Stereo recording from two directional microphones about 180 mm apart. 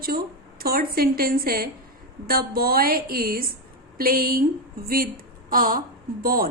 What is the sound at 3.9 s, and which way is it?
Speech, 55° right (ahead or behind).